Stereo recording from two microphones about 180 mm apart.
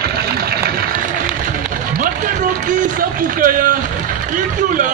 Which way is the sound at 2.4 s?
45° right (ahead or behind).